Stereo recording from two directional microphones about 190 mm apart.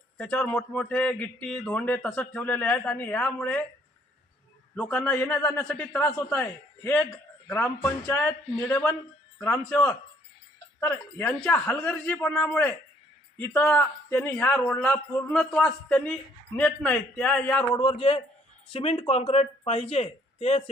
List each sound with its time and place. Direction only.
0.2 s a man's voice: 10° left (ahead or behind)
4.8 s a man's voice: 5° left (ahead or behind)
17.7 s a man's voice: 25° left (ahead or behind)